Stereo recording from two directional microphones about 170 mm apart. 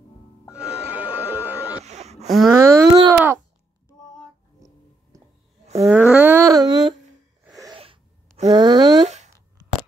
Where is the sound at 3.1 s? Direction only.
15° right (ahead or behind).